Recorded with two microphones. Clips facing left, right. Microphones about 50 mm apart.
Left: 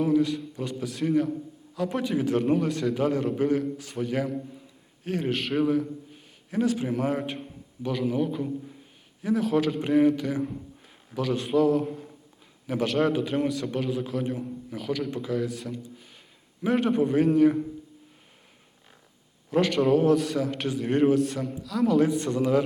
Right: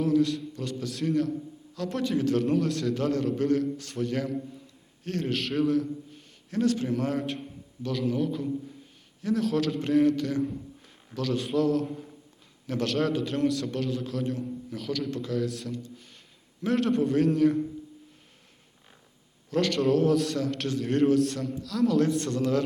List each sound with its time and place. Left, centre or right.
0.0 s a man's voice: centre
19.5 s a man's voice: centre